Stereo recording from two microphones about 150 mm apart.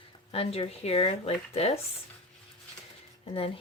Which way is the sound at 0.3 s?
40° left (ahead or behind).